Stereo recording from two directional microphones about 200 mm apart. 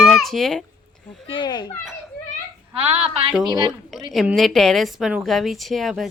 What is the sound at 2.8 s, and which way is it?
Speech, 30° right (ahead or behind).